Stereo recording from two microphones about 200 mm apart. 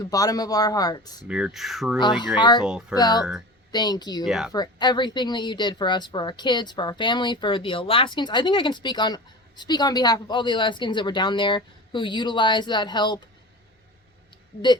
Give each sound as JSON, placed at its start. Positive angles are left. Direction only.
{"t": 0.0, "sound": "speech", "side_deg": 20}
{"t": 1.3, "sound": "speech", "side_deg": -5}
{"t": 2.0, "sound": "speech", "side_deg": 20}
{"t": 4.3, "sound": "speech", "side_deg": 0}
{"t": 4.5, "sound": "speech", "side_deg": 20}